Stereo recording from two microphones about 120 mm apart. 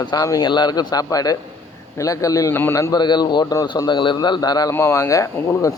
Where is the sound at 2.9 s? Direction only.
35° left (ahead or behind).